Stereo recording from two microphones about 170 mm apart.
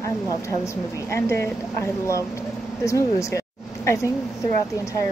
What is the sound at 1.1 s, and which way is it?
Speech, 15° left (ahead or behind).